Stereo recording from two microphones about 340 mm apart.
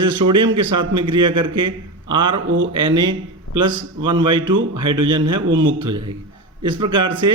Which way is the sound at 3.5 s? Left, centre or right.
Left.